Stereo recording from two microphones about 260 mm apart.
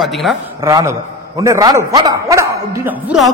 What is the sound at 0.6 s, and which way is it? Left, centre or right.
A man's voice, centre.